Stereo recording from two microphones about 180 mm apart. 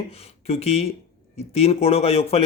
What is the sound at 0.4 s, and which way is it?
A man's voice, 35° left (ahead or behind).